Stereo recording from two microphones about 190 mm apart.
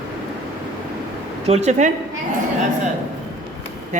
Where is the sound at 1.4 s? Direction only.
35° right (ahead or behind).